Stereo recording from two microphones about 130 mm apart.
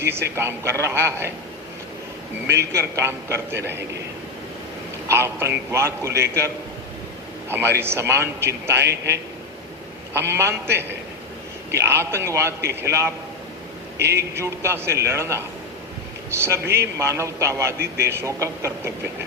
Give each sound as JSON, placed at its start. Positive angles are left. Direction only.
{"t": 0.0, "sound": "a man's voice", "side_deg": -20}
{"t": 2.7, "sound": "a man's voice", "side_deg": -20}
{"t": 5.0, "sound": "a man's voice", "side_deg": -20}
{"t": 7.5, "sound": "a man's voice", "side_deg": -20}
{"t": 10.2, "sound": "a man's voice", "side_deg": -20}
{"t": 16.4, "sound": "a man's voice", "side_deg": -20}